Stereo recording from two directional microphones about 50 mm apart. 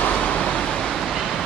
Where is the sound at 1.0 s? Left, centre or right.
Centre.